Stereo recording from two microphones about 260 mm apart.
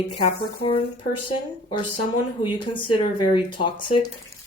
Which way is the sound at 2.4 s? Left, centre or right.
Centre.